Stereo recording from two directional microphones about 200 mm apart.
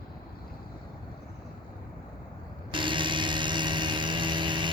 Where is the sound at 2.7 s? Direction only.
25° right (ahead or behind).